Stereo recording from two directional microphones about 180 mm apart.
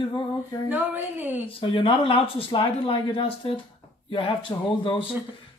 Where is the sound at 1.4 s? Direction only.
30° left (ahead or behind).